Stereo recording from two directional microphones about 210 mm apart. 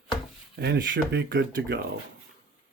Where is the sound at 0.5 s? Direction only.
55° right (ahead or behind).